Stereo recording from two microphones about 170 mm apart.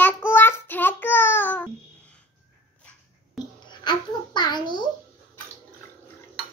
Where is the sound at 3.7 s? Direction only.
25° left (ahead or behind).